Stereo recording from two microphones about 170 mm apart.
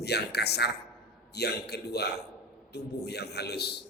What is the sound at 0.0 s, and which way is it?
A woman's voice, 75° left (ahead or behind).